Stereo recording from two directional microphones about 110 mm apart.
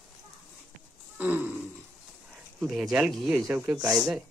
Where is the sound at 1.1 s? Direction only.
15° right (ahead or behind).